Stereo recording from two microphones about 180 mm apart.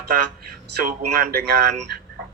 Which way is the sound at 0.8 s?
60° right (ahead or behind).